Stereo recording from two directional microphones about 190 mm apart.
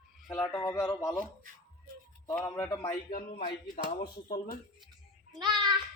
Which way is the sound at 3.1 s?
50° left (ahead or behind).